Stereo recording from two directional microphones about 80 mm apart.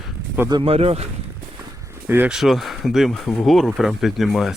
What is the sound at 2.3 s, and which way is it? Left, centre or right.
Speech, centre.